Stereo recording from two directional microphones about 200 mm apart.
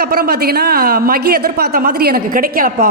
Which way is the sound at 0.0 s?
50° right (ahead or behind).